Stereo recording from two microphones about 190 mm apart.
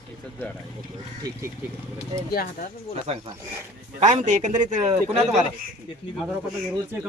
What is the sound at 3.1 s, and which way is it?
Speech, 35° right (ahead or behind).